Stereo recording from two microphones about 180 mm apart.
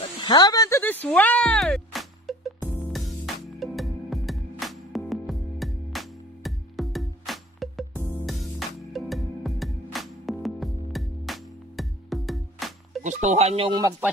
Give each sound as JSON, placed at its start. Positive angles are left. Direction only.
{"t": 0.2, "sound": "chop", "side_deg": 20}
{"t": 2.9, "sound": "music", "side_deg": 0}
{"t": 8.0, "sound": "music", "side_deg": 10}
{"t": 8.3, "sound": "music", "side_deg": 0}
{"t": 13.0, "sound": "speech", "side_deg": -40}